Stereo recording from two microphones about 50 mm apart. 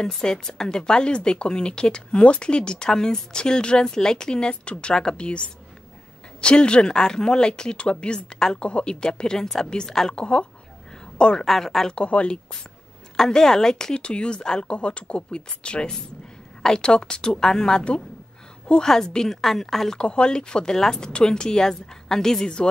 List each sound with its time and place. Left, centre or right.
0.0 s a woman's voice: centre
11.4 s speech: centre
11.9 s speech: left
13.1 s speech: centre
20.0 s speech: centre